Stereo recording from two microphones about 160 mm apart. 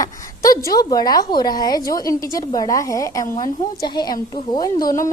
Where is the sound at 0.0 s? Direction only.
20° left (ahead or behind).